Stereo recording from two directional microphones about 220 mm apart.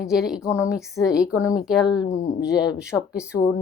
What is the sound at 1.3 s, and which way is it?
Speech, 15° left (ahead or behind).